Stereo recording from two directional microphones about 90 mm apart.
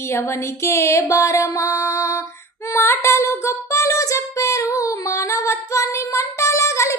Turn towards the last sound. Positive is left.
turn(degrees=35)  # may be behind; listen again after turning